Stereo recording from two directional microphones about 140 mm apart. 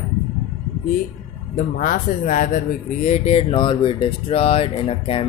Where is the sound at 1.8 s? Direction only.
70° left (ahead or behind).